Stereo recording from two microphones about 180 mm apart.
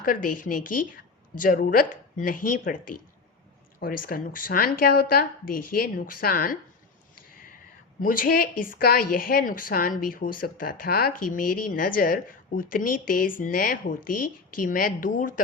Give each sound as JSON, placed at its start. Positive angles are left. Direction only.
{"t": 0.0, "sound": "a woman's voice", "side_deg": 50}
{"t": 7.2, "sound": "a sound", "side_deg": 50}
{"t": 8.0, "sound": "a woman's voice", "side_deg": 50}